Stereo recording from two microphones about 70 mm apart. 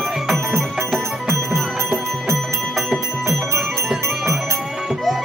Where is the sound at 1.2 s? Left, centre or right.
Right.